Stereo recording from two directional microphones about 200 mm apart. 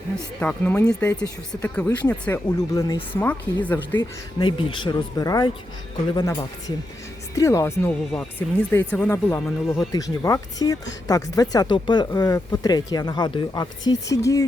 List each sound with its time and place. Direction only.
0.3 s speech: 5° left (ahead or behind)
3.9 s speech: 20° left (ahead or behind)